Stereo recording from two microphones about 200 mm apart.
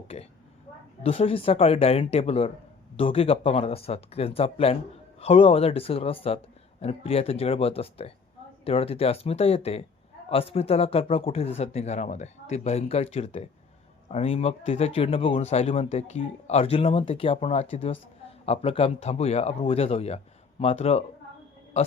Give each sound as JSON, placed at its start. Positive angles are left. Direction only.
{"t": 0.1, "sound": "speech", "side_deg": 30}